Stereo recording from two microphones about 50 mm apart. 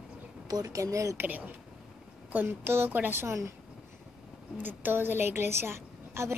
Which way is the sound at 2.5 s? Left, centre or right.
Right.